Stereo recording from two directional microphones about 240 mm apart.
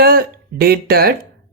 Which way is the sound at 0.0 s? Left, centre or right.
Right.